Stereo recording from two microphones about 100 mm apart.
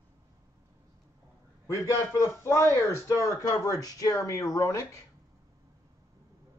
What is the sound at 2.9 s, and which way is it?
Speech, 35° left (ahead or behind).